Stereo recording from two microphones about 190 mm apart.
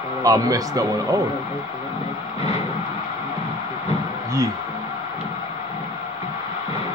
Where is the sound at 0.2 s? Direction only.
20° right (ahead or behind).